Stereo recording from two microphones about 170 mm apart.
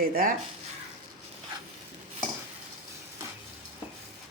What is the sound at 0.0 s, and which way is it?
Speech, 60° right (ahead or behind).